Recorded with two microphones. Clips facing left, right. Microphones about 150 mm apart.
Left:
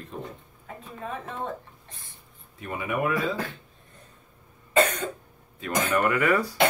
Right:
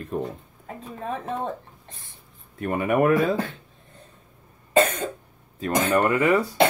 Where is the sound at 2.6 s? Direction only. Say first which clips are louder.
Right 8 dB; 55° right (ahead or behind).